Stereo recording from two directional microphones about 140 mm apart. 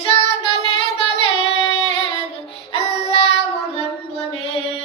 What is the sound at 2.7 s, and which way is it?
Child singing, 40° left (ahead or behind).